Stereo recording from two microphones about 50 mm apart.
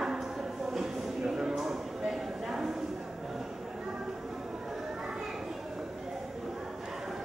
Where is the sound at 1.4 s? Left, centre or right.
Centre.